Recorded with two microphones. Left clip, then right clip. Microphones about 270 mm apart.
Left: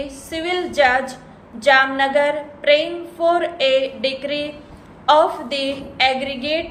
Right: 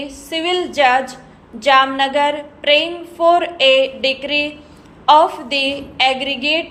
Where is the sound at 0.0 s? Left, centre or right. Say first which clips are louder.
Right 4 dB; centre.